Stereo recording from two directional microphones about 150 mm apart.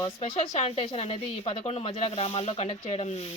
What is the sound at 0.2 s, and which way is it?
Speech, 45° left (ahead or behind).